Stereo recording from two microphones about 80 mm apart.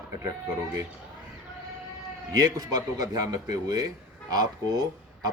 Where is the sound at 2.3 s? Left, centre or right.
Right.